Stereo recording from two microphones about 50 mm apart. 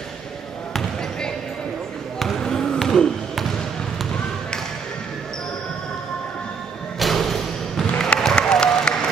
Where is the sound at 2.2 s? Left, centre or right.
Centre.